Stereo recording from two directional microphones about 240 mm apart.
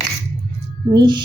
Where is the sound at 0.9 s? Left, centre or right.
Centre.